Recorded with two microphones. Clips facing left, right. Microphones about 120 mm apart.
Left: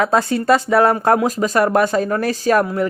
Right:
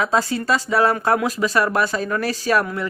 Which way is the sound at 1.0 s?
35° left (ahead or behind).